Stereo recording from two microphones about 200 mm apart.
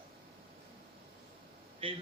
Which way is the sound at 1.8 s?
25° right (ahead or behind).